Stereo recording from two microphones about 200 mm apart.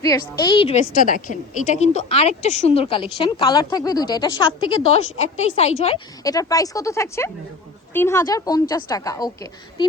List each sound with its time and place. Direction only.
0.0 s a woman's voice: 20° left (ahead or behind)
1.0 s a woman's voice: 40° left (ahead or behind); by 4.4 s 20° left (ahead or behind)
4.9 s a woman's voice: 35° left (ahead or behind)
6.2 s a woman's voice: 15° left (ahead or behind)